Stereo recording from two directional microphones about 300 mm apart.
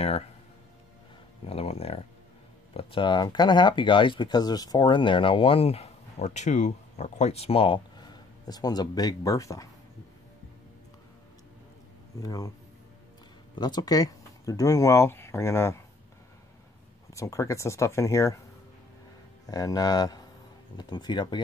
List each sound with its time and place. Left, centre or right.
1.4 s speech: centre
12.2 s speech: centre
13.6 s speech: centre
17.1 s speech: centre
19.4 s speech: centre